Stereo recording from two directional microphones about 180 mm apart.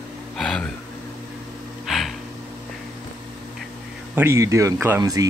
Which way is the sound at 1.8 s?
Centre (ahead or behind).